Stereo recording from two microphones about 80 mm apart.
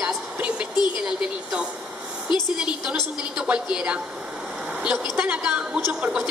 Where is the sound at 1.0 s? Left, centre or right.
Centre.